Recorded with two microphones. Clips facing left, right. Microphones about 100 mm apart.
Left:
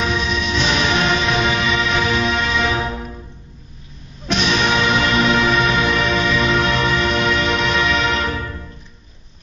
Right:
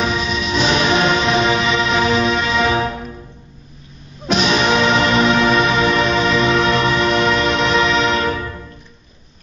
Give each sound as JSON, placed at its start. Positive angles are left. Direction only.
{"t": 0.0, "sound": "music", "side_deg": -5}
{"t": 0.7, "sound": "music", "side_deg": -20}
{"t": 1.3, "sound": "music", "side_deg": 0}
{"t": 4.5, "sound": "music", "side_deg": -5}